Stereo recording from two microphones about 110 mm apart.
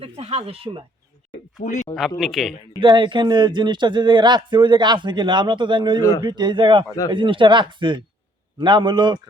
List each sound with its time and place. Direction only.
0.0 s speech: 70° right (ahead or behind)
2.0 s speech: centre (ahead or behind)
2.8 s speech: 45° right (ahead or behind)